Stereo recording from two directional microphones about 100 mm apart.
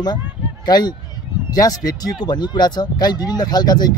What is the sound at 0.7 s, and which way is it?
Speech, 45° left (ahead or behind).